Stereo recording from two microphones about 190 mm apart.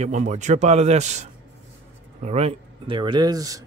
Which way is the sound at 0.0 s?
40° right (ahead or behind).